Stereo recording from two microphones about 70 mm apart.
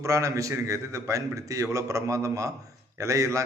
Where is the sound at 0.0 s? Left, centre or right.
Right.